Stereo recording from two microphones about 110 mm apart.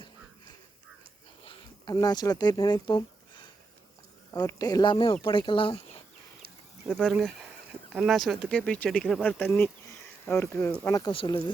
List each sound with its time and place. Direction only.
1.8 s speech: 35° left (ahead or behind)
4.4 s speech: 35° left (ahead or behind); by 6.0 s 55° left (ahead or behind)
6.8 s speech: centre (ahead or behind)
9.2 s speech: 15° left (ahead or behind)
11.1 s speech: 55° left (ahead or behind)